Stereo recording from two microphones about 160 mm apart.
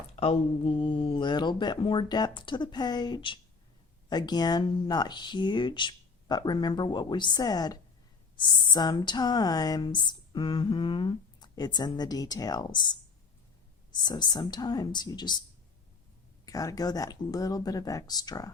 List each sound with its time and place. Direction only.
0.2 s speech: 35° left (ahead or behind)
16.5 s speech: 20° left (ahead or behind)